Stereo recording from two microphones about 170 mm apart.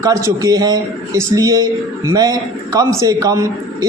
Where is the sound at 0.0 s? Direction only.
20° right (ahead or behind).